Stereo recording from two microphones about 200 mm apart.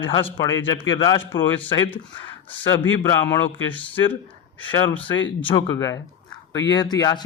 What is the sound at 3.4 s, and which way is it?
Speech, 10° left (ahead or behind).